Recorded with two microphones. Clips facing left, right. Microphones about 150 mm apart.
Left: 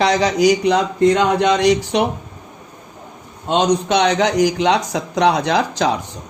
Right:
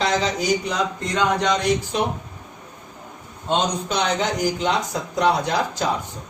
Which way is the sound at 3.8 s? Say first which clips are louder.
Left 7 dB; 85° left.